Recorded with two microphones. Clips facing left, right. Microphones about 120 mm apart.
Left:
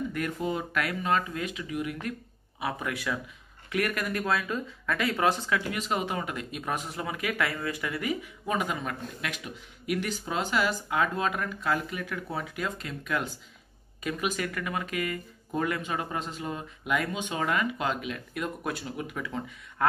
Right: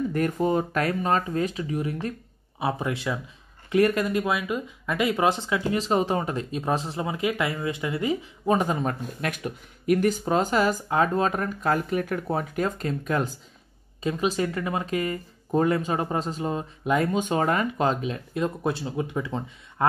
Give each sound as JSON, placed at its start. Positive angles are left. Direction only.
{"t": 0.1, "sound": "speech", "side_deg": -40}
{"t": 14.0, "sound": "speech", "side_deg": -30}